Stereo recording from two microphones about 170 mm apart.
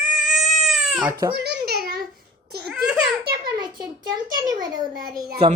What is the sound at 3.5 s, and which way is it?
A child's voice, 25° right (ahead or behind).